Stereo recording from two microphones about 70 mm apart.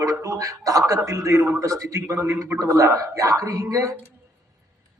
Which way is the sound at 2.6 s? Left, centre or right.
Right.